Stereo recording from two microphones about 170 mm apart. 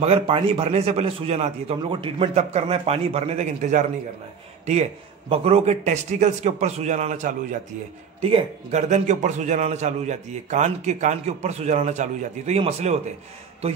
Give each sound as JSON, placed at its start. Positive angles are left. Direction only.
{"t": 0.0, "sound": "speech", "side_deg": -35}
{"t": 5.3, "sound": "a man's voice", "side_deg": -35}